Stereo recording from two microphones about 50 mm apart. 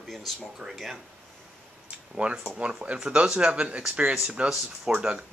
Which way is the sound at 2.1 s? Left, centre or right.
Centre.